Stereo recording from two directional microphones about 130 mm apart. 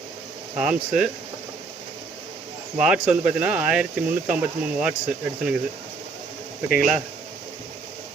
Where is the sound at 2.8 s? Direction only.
5° right (ahead or behind).